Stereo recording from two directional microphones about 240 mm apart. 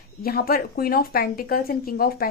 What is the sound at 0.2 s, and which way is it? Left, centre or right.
A woman's voice, left.